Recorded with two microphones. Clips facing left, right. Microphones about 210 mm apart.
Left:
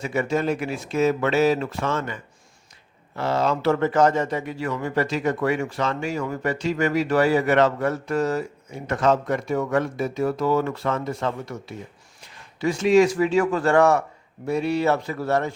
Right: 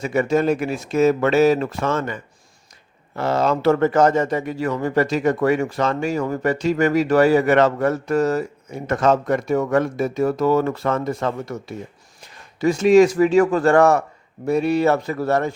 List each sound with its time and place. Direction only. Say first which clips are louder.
0.0 s a man's voice: right 5 dB; 45° right (ahead or behind)
3.2 s a man's voice: right 3 dB; 45° right (ahead or behind)
12.5 s a man's voice: right 4 dB; 45° right (ahead or behind)